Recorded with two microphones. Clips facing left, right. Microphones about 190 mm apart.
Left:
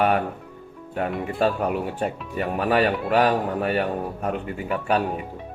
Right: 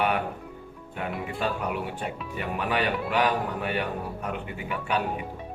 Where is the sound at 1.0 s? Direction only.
40° left (ahead or behind).